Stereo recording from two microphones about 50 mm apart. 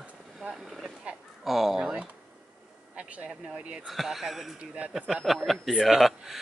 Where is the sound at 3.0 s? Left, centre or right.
Right.